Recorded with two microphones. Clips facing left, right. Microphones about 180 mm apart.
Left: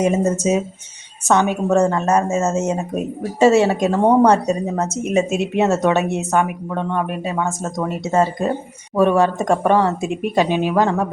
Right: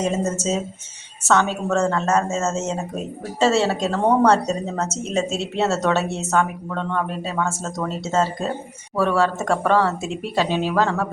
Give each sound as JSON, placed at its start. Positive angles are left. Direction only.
{"t": 0.0, "sound": "a woman's voice", "side_deg": 15}